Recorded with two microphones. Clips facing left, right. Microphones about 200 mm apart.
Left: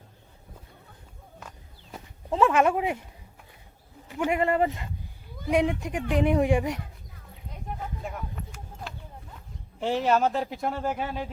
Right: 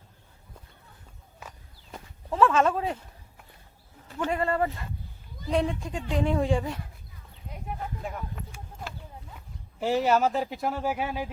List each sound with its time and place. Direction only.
2.3 s speech: 15° left (ahead or behind)
4.1 s speech: 15° left (ahead or behind)
8.0 s a sound: centre (ahead or behind)
9.8 s speech: 5° right (ahead or behind)